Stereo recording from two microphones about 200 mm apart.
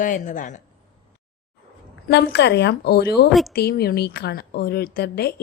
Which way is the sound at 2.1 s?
55° left (ahead or behind).